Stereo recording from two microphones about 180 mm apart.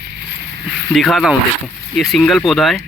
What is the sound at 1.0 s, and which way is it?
Speech, centre (ahead or behind).